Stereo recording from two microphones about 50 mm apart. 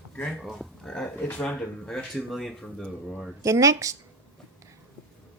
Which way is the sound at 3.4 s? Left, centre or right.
Right.